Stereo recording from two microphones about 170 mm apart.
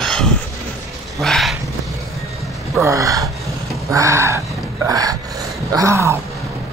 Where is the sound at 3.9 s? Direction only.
15° right (ahead or behind).